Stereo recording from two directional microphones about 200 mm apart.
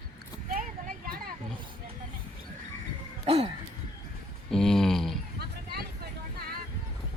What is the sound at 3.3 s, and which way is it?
Music, 30° right (ahead or behind).